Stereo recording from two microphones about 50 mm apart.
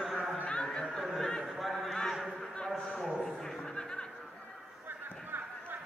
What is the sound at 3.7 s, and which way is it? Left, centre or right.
Music, centre.